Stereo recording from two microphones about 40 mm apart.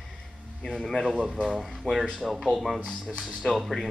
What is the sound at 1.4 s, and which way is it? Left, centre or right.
Speech, centre.